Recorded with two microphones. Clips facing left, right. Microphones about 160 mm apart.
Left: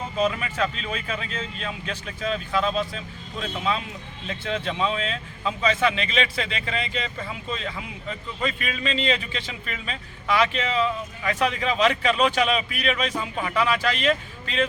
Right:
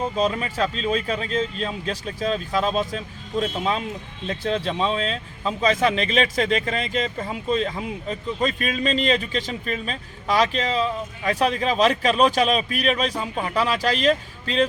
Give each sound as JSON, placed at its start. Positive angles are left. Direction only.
{"t": 0.2, "sound": "speech", "side_deg": -35}